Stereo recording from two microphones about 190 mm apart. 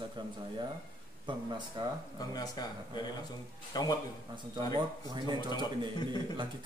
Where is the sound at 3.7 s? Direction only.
20° left (ahead or behind).